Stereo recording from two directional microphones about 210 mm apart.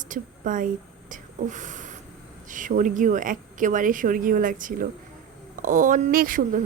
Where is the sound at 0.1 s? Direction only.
40° right (ahead or behind).